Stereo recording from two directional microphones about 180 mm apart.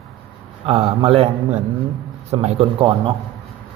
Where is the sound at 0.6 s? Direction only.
35° right (ahead or behind).